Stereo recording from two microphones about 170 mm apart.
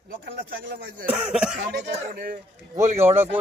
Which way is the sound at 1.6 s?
80° right.